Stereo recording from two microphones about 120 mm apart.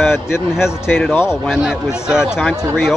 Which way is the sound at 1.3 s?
5° right (ahead or behind).